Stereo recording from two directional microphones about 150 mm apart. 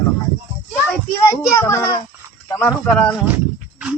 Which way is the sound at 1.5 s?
20° left (ahead or behind).